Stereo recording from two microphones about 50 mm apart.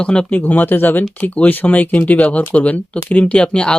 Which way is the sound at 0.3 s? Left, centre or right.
Left.